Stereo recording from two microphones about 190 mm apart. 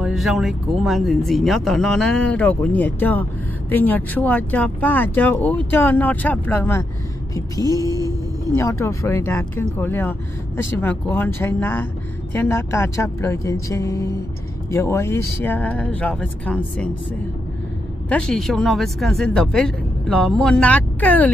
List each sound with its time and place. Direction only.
0.0 s speech: centre (ahead or behind)
18.1 s speech: 5° left (ahead or behind)